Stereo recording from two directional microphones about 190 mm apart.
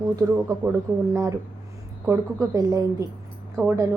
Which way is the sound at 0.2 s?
15° right (ahead or behind).